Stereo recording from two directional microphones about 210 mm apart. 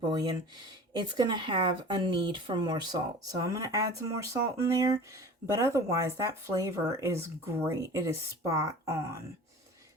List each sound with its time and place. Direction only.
0.0 s speech: 20° right (ahead or behind)